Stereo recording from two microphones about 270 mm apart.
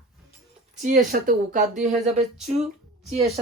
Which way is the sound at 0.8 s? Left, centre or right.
Right.